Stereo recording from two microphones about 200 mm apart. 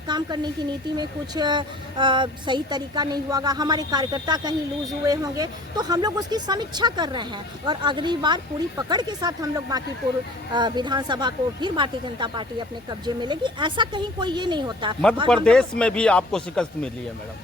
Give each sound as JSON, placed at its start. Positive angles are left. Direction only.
{"t": 0.1, "sound": "a woman's voice", "side_deg": -20}
{"t": 15.3, "sound": "speech", "side_deg": 0}